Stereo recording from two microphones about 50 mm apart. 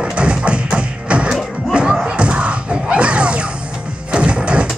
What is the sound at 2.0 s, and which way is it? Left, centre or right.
Music, centre.